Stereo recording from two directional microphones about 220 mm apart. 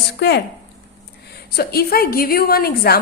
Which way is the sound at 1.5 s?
45° left (ahead or behind).